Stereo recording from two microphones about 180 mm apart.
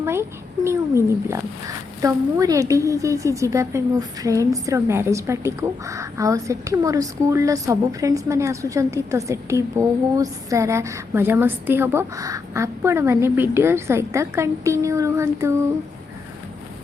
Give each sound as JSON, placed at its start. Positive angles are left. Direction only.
{"t": 0.0, "sound": "a woman's voice", "side_deg": -15}